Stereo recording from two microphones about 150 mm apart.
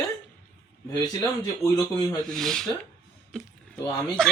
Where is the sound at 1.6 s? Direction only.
25° left (ahead or behind).